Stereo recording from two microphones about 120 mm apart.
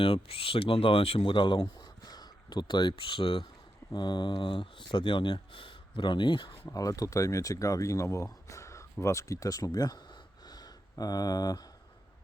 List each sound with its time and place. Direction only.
0.0 s speech: 50° left (ahead or behind)
6.7 s speech: 30° left (ahead or behind)